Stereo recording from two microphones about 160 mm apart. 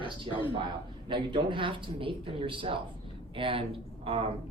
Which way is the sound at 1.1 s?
30° right (ahead or behind).